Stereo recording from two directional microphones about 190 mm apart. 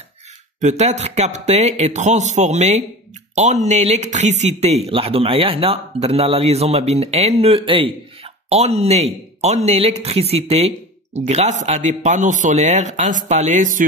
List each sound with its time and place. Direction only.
0.6 s speech: 35° right (ahead or behind)